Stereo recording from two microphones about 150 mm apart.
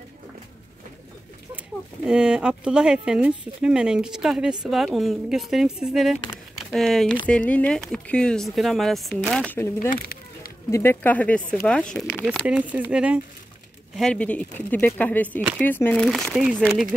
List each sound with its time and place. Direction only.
2.0 s speech: 5° right (ahead or behind)
9.8 s a sound: 75° left (ahead or behind)
10.7 s speech: 15° left (ahead or behind)
12.3 s speech: 5° right (ahead or behind)
13.9 s speech: 5° left (ahead or behind)
16.1 s speech: centre (ahead or behind)